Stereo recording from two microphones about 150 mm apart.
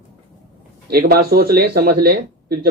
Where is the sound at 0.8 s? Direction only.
90° right.